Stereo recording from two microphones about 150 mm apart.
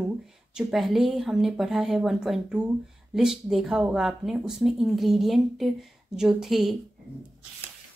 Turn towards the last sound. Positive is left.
turn(degrees=0)  # may be behind; listen again after turning